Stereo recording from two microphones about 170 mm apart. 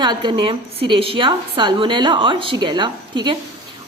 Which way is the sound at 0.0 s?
25° right (ahead or behind).